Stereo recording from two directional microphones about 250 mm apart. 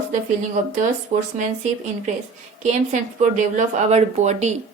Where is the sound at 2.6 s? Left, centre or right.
Right.